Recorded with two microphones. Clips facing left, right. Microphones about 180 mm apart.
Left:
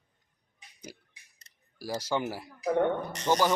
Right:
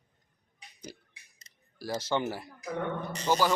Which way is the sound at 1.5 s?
60° left (ahead or behind).